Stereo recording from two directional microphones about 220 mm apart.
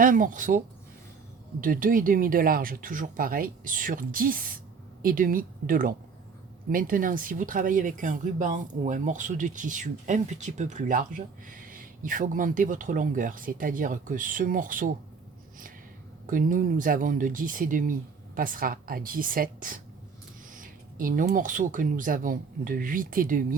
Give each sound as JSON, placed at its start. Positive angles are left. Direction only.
{"t": 0.0, "sound": "speech", "side_deg": -35}
{"t": 1.6, "sound": "speech", "side_deg": -40}
{"t": 16.2, "sound": "speech", "side_deg": -40}